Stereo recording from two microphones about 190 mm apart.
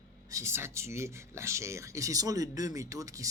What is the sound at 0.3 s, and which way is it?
Speech, 15° right (ahead or behind).